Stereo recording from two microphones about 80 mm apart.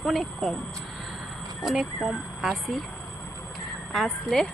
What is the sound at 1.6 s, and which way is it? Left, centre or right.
Speech, centre.